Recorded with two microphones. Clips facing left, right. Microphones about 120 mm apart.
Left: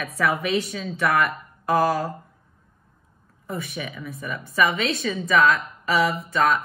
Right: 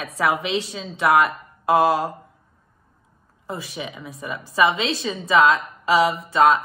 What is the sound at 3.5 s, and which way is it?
Speech, 25° right (ahead or behind).